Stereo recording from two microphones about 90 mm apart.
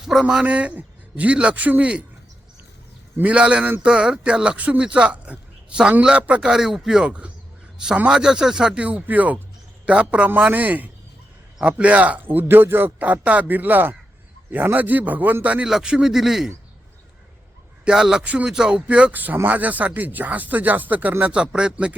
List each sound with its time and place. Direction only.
0.0 s speech: 5° right (ahead or behind)
3.2 s speech: 15° right (ahead or behind)
17.8 s speech: 5° right (ahead or behind)